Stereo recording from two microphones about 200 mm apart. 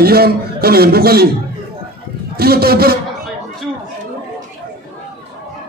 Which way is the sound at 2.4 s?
50° right (ahead or behind).